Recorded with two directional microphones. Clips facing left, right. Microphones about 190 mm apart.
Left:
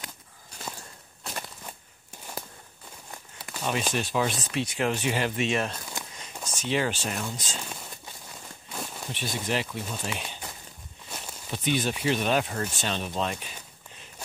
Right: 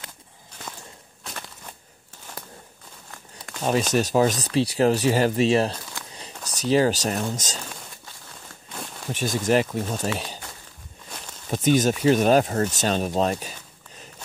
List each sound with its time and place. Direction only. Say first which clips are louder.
3.6 s speech: right 7 dB; 40° right (ahead or behind)
8.7 s a sound: even; 5° left (ahead or behind)
9.1 s speech: right 9 dB; 45° right (ahead or behind)
11.1 s walk: even; 5° left (ahead or behind)
11.5 s speech: right 8 dB; 45° right (ahead or behind)